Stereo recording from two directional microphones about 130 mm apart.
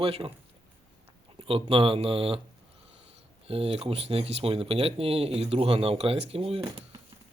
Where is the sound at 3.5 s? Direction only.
50° right (ahead or behind).